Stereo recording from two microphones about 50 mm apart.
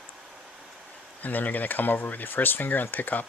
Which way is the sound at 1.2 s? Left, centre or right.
Left.